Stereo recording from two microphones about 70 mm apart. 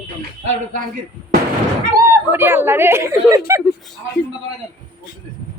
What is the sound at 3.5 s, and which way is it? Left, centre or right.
Speech, right.